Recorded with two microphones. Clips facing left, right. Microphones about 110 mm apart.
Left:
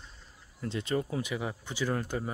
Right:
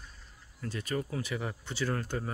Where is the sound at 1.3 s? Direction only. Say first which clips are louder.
Left 1 dB; 10° left (ahead or behind).